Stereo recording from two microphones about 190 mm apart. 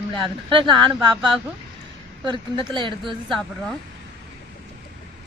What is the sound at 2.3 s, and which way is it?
Speech, 25° right (ahead or behind).